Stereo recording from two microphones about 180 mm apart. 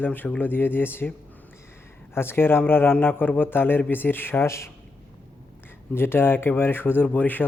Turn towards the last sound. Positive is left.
turn(degrees=10)  # may be behind; listen again after turning